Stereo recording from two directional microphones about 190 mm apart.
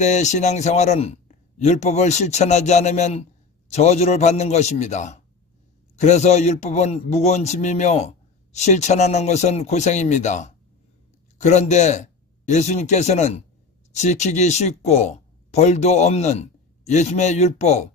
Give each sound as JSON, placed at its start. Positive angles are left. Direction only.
{"t": 0.0, "sound": "a man's voice", "side_deg": 40}